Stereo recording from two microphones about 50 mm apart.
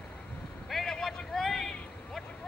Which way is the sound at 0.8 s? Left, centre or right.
Centre.